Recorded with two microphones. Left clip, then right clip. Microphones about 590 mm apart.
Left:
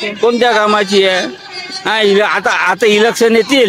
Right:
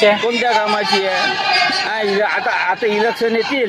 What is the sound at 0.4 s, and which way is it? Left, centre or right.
Speech, left.